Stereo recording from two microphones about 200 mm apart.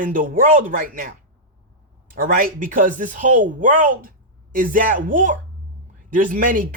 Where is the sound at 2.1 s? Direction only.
45° right (ahead or behind).